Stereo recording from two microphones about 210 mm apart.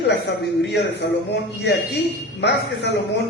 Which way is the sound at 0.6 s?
55° left (ahead or behind).